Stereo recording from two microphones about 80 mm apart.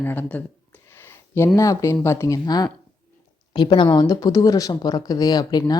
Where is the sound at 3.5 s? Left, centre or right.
Left.